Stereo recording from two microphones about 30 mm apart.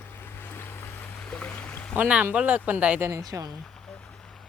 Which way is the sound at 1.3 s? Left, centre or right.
Left.